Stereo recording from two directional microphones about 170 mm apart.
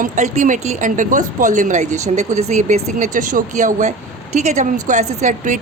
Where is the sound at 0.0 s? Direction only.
50° right (ahead or behind).